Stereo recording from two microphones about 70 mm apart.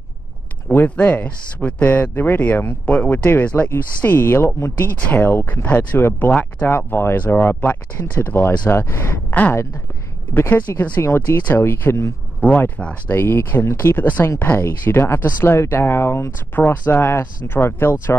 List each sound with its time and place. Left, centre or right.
0.7 s speech: left
5.0 s speech: left
9.3 s speech: left
10.3 s speech: left
12.4 s speech: left
13.1 s speech: left